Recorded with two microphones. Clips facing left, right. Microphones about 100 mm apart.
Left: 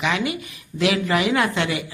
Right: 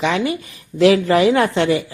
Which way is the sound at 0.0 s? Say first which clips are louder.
Right 4 dB; 35° right (ahead or behind).